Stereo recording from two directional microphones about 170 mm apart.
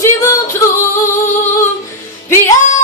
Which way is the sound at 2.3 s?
15° left (ahead or behind).